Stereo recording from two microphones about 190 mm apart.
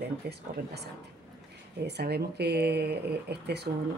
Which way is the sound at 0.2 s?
60° right (ahead or behind).